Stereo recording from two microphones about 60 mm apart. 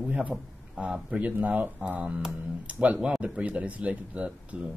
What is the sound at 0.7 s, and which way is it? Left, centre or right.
Speech, centre.